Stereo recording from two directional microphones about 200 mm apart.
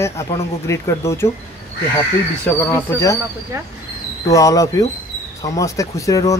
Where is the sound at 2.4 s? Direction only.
10° left (ahead or behind).